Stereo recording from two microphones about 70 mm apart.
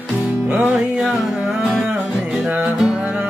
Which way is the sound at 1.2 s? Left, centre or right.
Centre.